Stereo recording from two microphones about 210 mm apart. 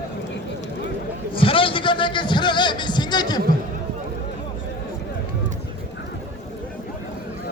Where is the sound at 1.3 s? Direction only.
25° left (ahead or behind).